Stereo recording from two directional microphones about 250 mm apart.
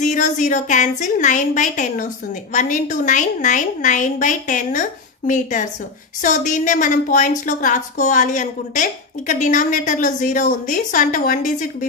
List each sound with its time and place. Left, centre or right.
0.0 s a woman's voice: left